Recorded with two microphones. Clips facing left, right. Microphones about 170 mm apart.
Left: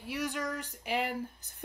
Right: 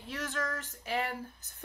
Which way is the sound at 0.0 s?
10° left (ahead or behind).